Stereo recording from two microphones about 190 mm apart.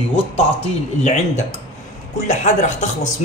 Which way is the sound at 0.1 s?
35° left (ahead or behind).